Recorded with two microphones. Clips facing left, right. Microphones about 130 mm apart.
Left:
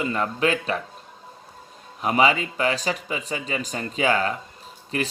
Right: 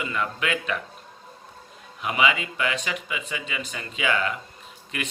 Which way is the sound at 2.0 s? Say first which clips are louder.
Left 4 dB; 35° left (ahead or behind).